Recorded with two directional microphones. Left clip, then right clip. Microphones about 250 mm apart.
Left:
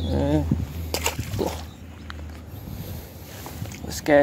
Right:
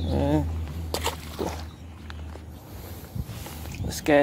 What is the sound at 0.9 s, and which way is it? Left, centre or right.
Pig, centre.